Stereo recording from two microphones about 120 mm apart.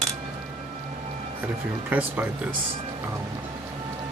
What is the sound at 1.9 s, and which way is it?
Speech, 15° right (ahead or behind).